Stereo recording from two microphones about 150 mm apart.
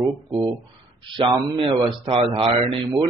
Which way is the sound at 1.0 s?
35° right (ahead or behind).